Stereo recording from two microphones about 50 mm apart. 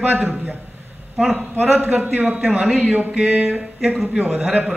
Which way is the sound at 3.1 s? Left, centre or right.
Centre.